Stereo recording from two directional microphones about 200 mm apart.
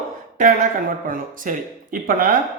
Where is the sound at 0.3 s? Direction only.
45° right (ahead or behind).